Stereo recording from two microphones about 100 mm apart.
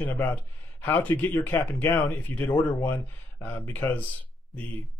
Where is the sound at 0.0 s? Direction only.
20° left (ahead or behind).